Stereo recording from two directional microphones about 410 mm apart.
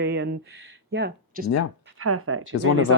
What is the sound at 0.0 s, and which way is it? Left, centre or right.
Speech, right.